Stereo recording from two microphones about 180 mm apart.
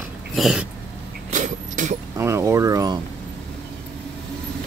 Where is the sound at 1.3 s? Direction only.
45° right (ahead or behind).